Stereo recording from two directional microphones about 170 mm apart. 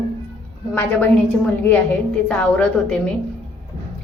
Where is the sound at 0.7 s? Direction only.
10° left (ahead or behind).